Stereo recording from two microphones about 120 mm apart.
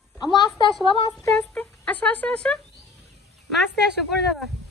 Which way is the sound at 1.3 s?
10° left (ahead or behind).